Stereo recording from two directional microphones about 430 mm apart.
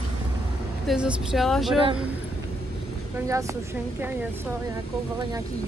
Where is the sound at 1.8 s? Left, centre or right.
Centre.